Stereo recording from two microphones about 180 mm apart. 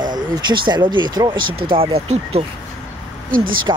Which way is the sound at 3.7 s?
25° right (ahead or behind).